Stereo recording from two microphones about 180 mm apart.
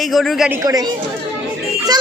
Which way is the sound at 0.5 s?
20° right (ahead or behind).